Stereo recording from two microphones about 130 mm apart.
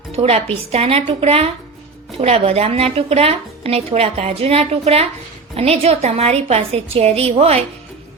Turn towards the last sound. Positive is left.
turn(degrees=-50)  # may be behind; listen again after turning